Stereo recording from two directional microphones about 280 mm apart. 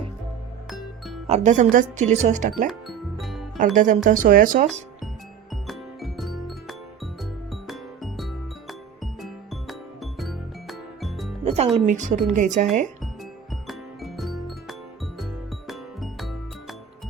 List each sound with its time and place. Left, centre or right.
0.7 s music: centre
1.3 s speech: right
2.6 s music: centre
3.6 s speech: right
5.6 s music: centre
11.4 s speech: right
13.5 s music: centre